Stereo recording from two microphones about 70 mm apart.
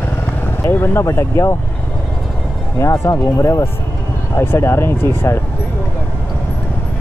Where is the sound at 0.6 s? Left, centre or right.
Left.